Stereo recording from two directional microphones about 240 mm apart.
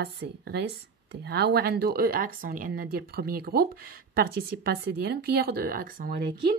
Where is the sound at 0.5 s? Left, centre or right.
Right.